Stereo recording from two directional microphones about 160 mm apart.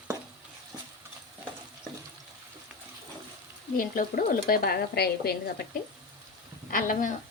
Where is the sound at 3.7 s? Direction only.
60° left (ahead or behind); by 5.5 s 80° left.